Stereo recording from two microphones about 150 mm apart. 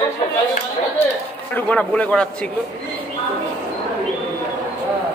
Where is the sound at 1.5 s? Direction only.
10° left (ahead or behind).